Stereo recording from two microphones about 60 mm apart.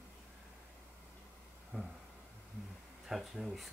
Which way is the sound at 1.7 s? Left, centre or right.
Right.